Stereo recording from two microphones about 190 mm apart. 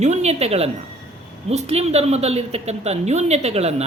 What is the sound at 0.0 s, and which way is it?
A woman's voice, 35° right (ahead or behind).